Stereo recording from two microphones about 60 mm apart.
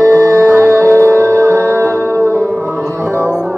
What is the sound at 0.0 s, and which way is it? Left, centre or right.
Music, right.